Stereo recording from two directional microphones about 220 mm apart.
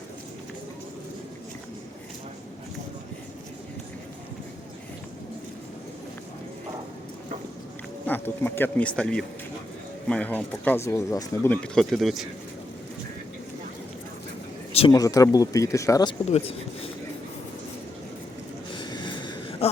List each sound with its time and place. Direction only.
8.0 s speech: 10° left (ahead or behind)
14.7 s speech: 25° left (ahead or behind)
16.3 s speech: 25° left (ahead or behind)
18.8 s a sound: 20° left (ahead or behind)